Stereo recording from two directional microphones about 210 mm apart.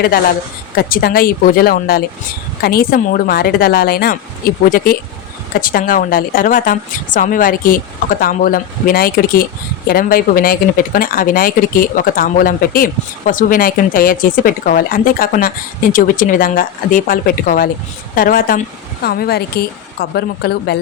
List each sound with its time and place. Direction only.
0.8 s a woman's voice: 45° left (ahead or behind)